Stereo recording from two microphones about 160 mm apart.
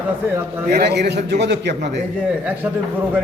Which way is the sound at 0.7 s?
80° right.